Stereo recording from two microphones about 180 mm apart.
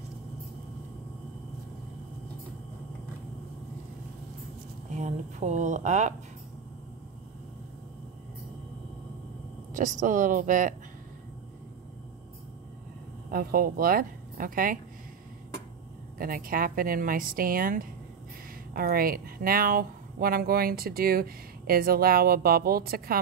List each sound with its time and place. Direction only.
4.9 s speech: 40° right (ahead or behind)
9.8 s speech: 45° right (ahead or behind)
13.3 s speech: 55° right (ahead or behind)
16.2 s speech: 50° right (ahead or behind)